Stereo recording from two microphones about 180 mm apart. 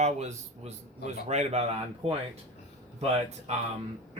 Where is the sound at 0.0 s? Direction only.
40° right (ahead or behind).